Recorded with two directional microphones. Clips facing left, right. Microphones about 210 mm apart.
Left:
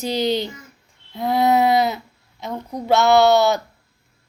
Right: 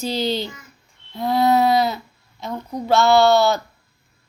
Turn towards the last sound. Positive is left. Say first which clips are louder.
# even
turn(degrees=20)  # may be behind; listen again after turning